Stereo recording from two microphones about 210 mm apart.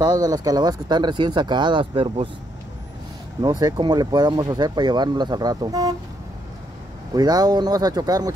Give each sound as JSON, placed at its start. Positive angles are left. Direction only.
{"t": 0.0, "sound": "speech", "side_deg": -20}
{"t": 3.4, "sound": "speech", "side_deg": -20}
{"t": 7.2, "sound": "speech", "side_deg": -20}